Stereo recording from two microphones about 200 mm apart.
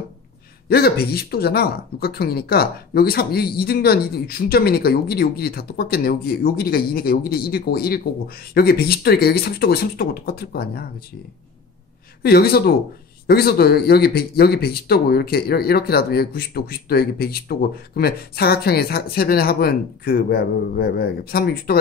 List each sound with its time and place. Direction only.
0.7 s speech: 50° left (ahead or behind)
12.2 s speech: 50° left (ahead or behind)